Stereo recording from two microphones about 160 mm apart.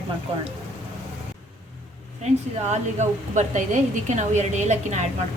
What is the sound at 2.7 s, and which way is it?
A woman's voice, 45° right (ahead or behind).